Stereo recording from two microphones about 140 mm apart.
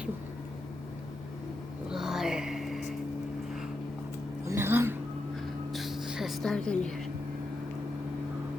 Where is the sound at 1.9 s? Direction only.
5° right (ahead or behind).